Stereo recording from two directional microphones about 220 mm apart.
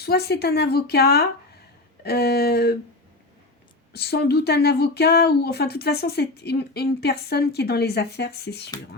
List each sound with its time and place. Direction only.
0.0 s speech: 45° left (ahead or behind)
3.9 s speech: 45° left (ahead or behind)